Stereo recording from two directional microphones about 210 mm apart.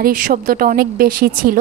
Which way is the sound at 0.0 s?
45° right (ahead or behind).